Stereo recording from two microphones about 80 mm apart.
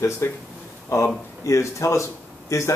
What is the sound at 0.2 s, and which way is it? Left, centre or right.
Speech, left.